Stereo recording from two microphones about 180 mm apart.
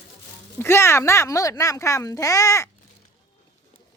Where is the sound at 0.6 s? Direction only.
15° left (ahead or behind).